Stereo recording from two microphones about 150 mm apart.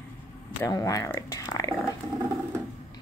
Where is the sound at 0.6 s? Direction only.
20° left (ahead or behind).